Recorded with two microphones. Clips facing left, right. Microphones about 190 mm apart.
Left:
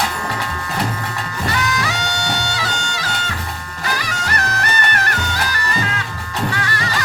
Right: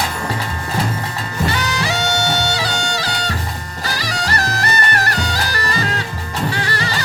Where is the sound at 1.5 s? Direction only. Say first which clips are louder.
Left 1 dB; 30° right (ahead or behind).